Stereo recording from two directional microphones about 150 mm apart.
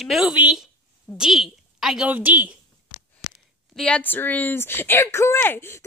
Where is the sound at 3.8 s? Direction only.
5° left (ahead or behind).